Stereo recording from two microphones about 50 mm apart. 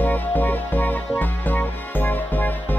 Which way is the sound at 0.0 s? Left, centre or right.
Left.